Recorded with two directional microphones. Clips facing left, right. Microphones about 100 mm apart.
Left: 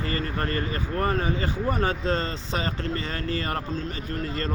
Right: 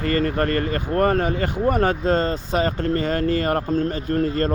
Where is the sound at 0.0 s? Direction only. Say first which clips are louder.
Right 8 dB; 50° right (ahead or behind).